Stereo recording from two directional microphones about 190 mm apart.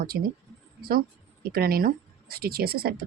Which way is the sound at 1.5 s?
50° right (ahead or behind).